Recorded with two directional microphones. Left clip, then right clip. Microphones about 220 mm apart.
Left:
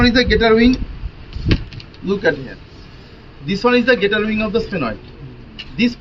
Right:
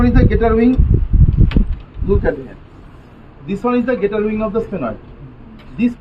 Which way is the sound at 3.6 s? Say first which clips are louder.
Left 3 dB; 5° right (ahead or behind).